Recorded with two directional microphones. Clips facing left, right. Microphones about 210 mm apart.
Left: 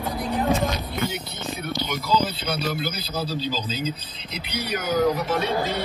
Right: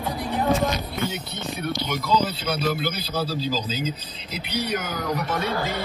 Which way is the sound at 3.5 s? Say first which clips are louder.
Right 1 dB; 10° right (ahead or behind).